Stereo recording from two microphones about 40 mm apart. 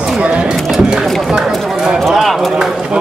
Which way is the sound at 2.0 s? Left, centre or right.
Centre.